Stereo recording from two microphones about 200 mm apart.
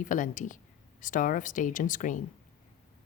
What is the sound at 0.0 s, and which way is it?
A woman's voice, 40° left (ahead or behind).